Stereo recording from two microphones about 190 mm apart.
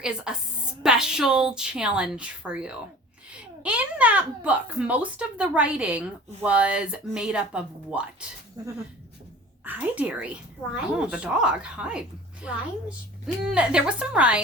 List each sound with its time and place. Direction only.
0.3 s a woman's voice: 5° right (ahead or behind)
8.6 s a sound: 20° right (ahead or behind)
9.6 s a child's voice: 10° right (ahead or behind)